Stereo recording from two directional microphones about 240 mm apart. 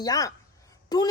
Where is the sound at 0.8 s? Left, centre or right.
Centre.